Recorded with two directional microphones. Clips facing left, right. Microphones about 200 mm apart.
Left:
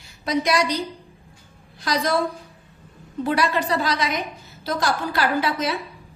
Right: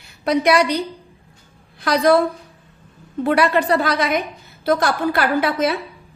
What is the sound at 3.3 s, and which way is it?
A woman's voice, 60° right (ahead or behind).